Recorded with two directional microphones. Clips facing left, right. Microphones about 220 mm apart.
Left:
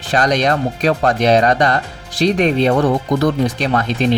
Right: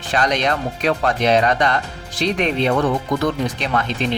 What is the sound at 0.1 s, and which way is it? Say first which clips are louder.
Speech: left 4 dB; 40° left (ahead or behind).